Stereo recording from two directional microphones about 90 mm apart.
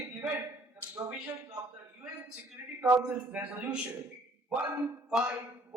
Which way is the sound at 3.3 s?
15° right (ahead or behind).